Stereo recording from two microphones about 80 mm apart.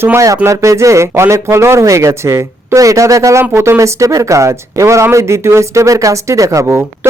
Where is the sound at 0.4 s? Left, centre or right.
Right.